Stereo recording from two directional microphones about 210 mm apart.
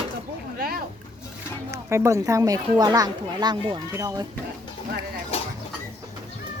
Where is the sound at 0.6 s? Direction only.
45° right (ahead or behind).